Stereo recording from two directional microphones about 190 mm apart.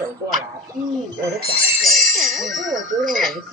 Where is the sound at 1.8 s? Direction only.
Centre (ahead or behind).